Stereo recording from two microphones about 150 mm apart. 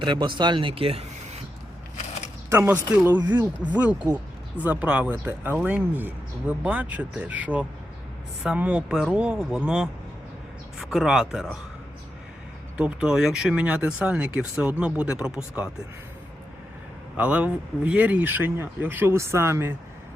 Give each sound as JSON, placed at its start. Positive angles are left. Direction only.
{"t": 0.0, "sound": "speech", "side_deg": -30}
{"t": 2.5, "sound": "speech", "side_deg": -15}
{"t": 12.7, "sound": "speech", "side_deg": -5}
{"t": 17.2, "sound": "speech", "side_deg": -10}